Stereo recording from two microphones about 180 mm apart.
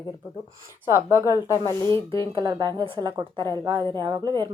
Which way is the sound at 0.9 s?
15° right (ahead or behind).